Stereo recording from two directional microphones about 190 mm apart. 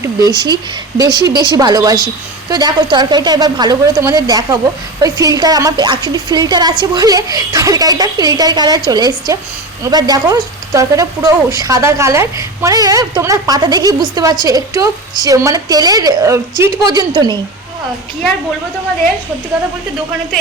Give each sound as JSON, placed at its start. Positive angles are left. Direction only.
{"t": 0.0, "sound": "speech", "side_deg": -20}